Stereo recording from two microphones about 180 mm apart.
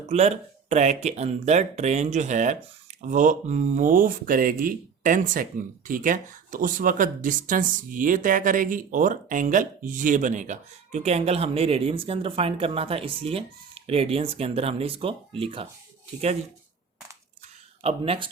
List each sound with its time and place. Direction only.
0.1 s speech: 35° right (ahead or behind)
17.8 s speech: 30° right (ahead or behind)